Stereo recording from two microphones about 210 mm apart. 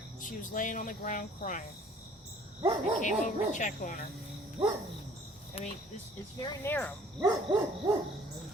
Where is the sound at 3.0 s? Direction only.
35° left (ahead or behind).